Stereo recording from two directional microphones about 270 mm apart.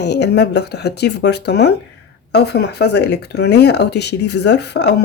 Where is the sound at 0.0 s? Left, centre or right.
Left.